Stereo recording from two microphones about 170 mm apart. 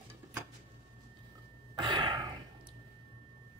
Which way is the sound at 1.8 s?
25° right (ahead or behind).